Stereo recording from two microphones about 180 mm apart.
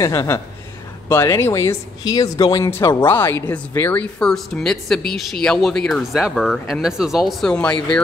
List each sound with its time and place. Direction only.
0.0 s speech: 15° left (ahead or behind)